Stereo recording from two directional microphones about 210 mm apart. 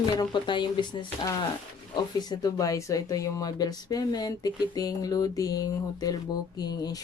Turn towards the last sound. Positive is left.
turn(degrees=20)  # may be behind; listen again after turning